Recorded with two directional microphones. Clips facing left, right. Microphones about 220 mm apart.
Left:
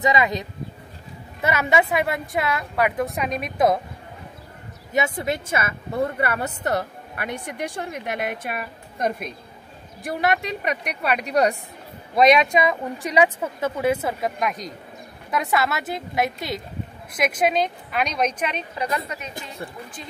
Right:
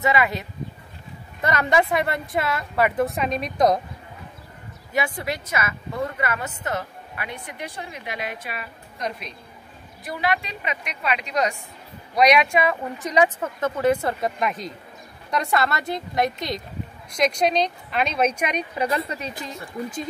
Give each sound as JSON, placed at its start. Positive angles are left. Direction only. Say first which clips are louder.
{"t": 0.0, "sound": "speech", "louder": "left 1 dB", "side_deg": 15}
{"t": 1.4, "sound": "a woman's voice", "louder": "even", "side_deg": 5}
{"t": 4.9, "sound": "a woman's voice", "louder": "left 3 dB", "side_deg": 25}
{"t": 7.2, "sound": "a woman's voice", "louder": "left 5 dB", "side_deg": 50}
{"t": 11.2, "sound": "a woman's voice", "louder": "left 6 dB", "side_deg": 35}
{"t": 12.2, "sound": "a woman's voice", "louder": "left 2 dB", "side_deg": 25}
{"t": 18.8, "sound": "a woman's voice", "louder": "right 2 dB", "side_deg": -25}